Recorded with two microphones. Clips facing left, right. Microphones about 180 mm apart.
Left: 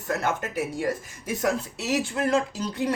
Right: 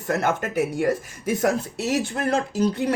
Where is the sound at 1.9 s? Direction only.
45° right (ahead or behind).